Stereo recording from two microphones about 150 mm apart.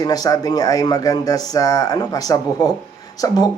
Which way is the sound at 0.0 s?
25° left (ahead or behind).